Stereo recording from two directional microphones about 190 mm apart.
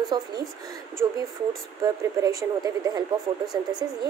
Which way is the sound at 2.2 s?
20° right (ahead or behind).